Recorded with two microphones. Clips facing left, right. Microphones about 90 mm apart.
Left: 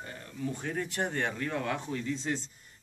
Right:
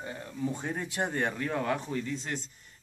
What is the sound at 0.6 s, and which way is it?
Speech, 15° right (ahead or behind).